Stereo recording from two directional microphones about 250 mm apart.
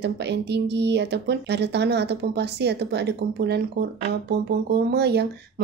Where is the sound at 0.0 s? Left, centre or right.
Right.